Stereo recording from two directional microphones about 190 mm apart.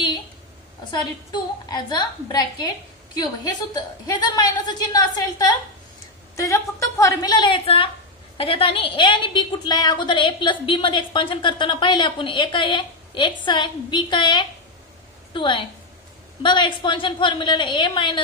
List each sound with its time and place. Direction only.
0.9 s a woman's voice: 20° left (ahead or behind)